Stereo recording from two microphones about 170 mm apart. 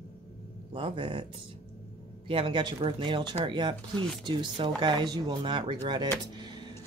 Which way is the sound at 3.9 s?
Centre (ahead or behind).